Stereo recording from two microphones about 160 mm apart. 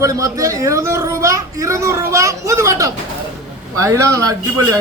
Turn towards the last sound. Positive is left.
turn(degrees=-20)  # may be behind; listen again after turning